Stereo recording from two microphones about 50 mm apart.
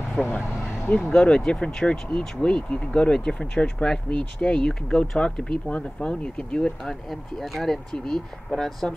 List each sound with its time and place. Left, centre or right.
0.2 s speech: left
1.2 s speech: centre
7.1 s speech: centre